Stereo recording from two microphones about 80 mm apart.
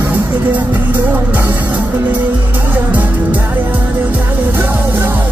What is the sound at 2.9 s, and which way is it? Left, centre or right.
Music, centre.